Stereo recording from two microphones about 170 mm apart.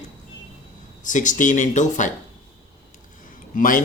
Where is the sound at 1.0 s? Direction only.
50° left (ahead or behind).